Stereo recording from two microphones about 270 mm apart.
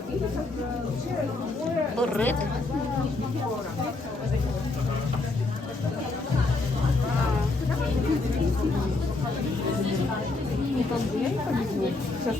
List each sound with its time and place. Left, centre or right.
2.0 s speech: centre